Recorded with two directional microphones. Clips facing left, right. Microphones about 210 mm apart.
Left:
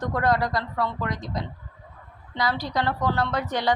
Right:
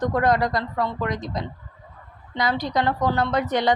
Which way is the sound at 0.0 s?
20° right (ahead or behind).